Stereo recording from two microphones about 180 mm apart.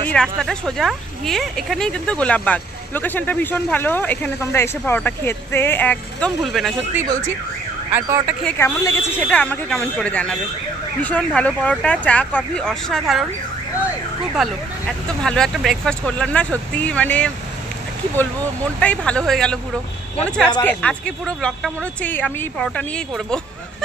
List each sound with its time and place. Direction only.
0.1 s speech: 5° left (ahead or behind)
7.9 s speech: 10° right (ahead or behind)
8.5 s speech: 15° left (ahead or behind)
14.3 s speech: centre (ahead or behind)
18.8 s speech: 5° left (ahead or behind)